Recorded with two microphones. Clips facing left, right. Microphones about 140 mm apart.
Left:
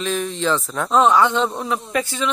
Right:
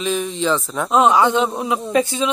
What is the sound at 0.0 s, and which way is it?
Speech, 5° right (ahead or behind).